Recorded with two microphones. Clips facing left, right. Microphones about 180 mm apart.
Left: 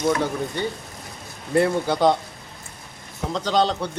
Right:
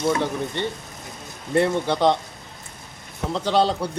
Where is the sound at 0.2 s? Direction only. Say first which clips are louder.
Even; centre (ahead or behind).